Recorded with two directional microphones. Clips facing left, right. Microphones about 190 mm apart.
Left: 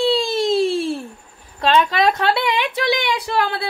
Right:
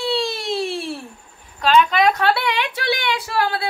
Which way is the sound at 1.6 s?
30° left (ahead or behind).